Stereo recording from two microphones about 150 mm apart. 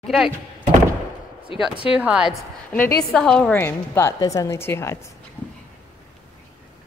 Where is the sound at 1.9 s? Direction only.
5° right (ahead or behind); by 4.9 s 15° left (ahead or behind).